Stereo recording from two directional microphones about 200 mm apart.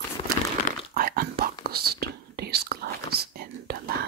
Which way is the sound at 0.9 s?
45° right (ahead or behind).